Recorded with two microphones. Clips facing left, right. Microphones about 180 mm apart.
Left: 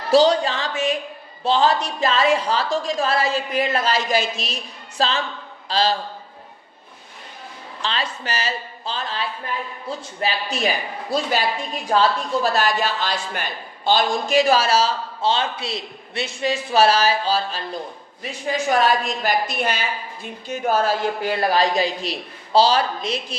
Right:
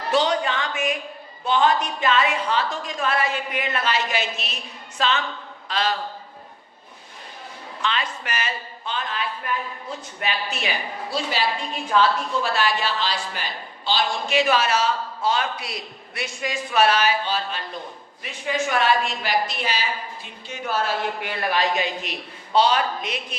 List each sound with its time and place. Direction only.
0.1 s a man's voice: 35° left (ahead or behind)
7.8 s a man's voice: 30° left (ahead or behind)